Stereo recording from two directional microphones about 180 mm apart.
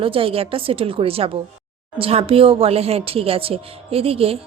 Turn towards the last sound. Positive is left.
turn(degrees=-30)  # may be behind; listen again after turning